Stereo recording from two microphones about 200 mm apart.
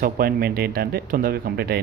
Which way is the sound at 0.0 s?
50° right (ahead or behind).